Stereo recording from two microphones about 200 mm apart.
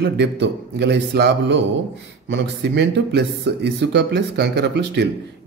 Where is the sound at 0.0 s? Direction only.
60° right (ahead or behind).